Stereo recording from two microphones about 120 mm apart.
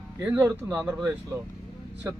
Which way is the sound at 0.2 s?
15° right (ahead or behind).